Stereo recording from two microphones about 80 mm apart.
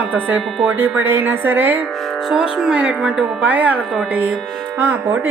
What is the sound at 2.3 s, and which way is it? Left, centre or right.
Speech, centre.